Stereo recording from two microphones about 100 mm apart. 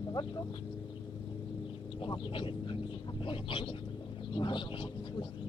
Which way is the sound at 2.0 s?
60° left (ahead or behind).